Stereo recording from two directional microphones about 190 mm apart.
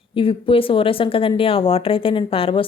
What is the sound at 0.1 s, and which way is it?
A woman's voice, 30° left (ahead or behind).